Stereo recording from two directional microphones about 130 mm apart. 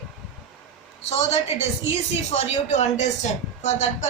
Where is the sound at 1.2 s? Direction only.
55° left (ahead or behind).